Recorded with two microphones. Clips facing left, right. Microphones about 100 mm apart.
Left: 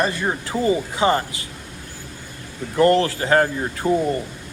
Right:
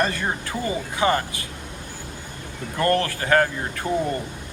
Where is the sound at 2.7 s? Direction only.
20° left (ahead or behind).